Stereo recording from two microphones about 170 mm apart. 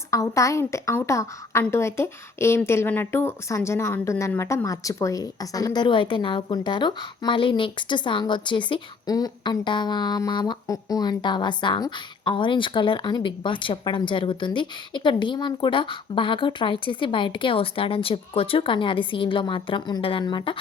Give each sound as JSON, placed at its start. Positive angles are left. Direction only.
{"t": 0.1, "sound": "a woman's voice", "side_deg": 20}